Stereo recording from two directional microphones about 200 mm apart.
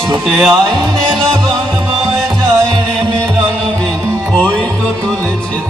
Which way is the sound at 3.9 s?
15° right (ahead or behind).